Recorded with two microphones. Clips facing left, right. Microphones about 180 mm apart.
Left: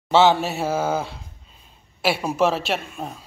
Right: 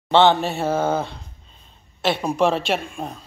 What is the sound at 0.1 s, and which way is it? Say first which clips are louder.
A man's voice: right 1 dB; 5° left (ahead or behind).